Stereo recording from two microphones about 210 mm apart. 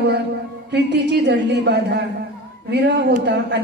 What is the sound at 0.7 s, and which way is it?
A man's voice, 55° right (ahead or behind).